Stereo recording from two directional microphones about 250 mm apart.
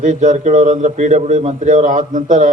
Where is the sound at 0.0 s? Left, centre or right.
Right.